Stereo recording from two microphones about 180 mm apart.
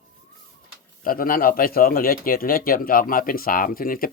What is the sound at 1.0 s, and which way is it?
A man's voice, 50° left (ahead or behind).